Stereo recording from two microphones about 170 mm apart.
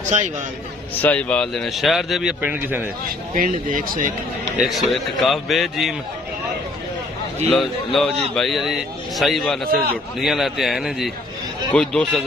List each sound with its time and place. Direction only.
0.1 s speech: 45° right (ahead or behind)
1.0 s speech: 10° left (ahead or behind); by 2.9 s 10° right (ahead or behind)
3.1 s speech: 55° right (ahead or behind)
4.6 s speech: centre (ahead or behind)
7.5 s speech: centre (ahead or behind)